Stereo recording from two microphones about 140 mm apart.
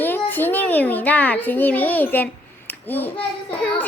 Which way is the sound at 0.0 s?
15° left (ahead or behind).